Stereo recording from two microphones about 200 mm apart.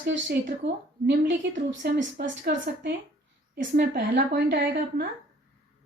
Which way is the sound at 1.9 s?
55° right (ahead or behind).